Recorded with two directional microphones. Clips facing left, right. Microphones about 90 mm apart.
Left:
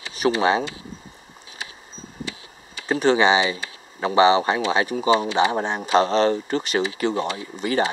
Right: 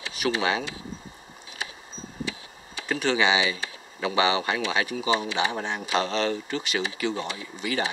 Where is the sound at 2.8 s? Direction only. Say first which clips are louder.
Left 6 dB; 35° left (ahead or behind).